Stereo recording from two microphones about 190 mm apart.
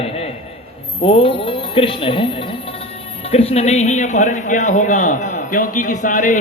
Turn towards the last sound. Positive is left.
turn(degrees=45)  # may be behind; listen again after turning